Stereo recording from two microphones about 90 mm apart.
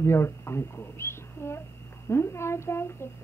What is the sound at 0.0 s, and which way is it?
A child's voice, 30° left (ahead or behind).